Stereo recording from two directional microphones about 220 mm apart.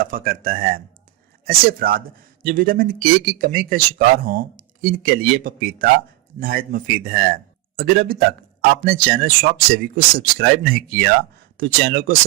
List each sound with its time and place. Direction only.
0.0 s speech: 40° right (ahead or behind)